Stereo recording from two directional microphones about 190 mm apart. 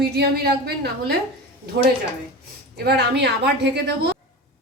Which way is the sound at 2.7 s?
60° right (ahead or behind).